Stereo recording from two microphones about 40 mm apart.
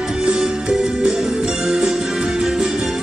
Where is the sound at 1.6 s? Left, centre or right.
Centre.